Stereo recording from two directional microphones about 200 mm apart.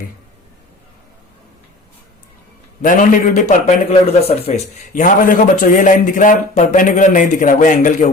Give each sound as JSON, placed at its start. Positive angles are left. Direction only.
{"t": 2.8, "sound": "a man's voice", "side_deg": 40}
{"t": 4.9, "sound": "a man's voice", "side_deg": 40}